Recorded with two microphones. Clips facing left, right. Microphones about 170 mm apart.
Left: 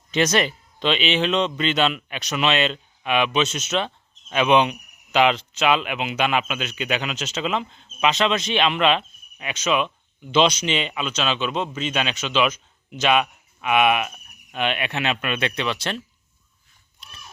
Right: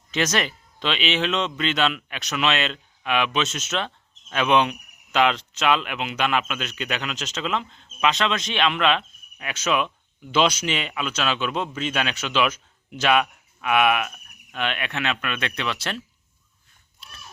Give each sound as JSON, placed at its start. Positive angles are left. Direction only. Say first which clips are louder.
{"t": 0.1, "sound": "speech", "louder": "left 4 dB", "side_deg": 0}
{"t": 9.6, "sound": "speech", "louder": "left 1 dB", "side_deg": 20}
{"t": 14.1, "sound": "cricket", "louder": "left 2 dB", "side_deg": 10}
{"t": 14.8, "sound": "speech", "louder": "left 2 dB", "side_deg": 25}
{"t": 15.1, "sound": "speech", "louder": "left 3 dB", "side_deg": 15}
{"t": 15.5, "sound": "speech", "louder": "left 3 dB", "side_deg": 0}